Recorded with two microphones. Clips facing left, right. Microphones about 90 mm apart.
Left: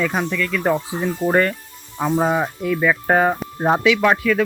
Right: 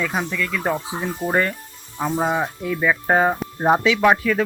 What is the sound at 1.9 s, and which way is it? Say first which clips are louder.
Speech: left 3 dB; 5° left (ahead or behind).